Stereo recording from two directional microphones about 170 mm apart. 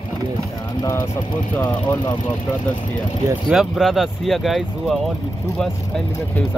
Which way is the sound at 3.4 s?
5° right (ahead or behind).